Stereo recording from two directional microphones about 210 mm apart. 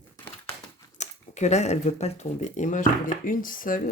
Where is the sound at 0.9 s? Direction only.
35° left (ahead or behind).